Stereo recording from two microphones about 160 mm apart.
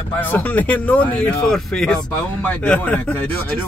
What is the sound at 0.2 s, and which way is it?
Speech, 10° left (ahead or behind).